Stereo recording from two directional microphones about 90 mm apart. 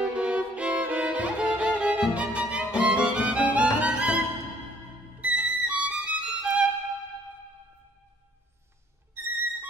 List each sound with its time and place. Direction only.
0.0 s violin: 10° right (ahead or behind)
5.2 s violin: 15° right (ahead or behind)
9.1 s music: 25° right (ahead or behind)